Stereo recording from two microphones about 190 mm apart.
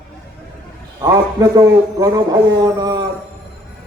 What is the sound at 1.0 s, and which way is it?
A man's voice, 20° right (ahead or behind).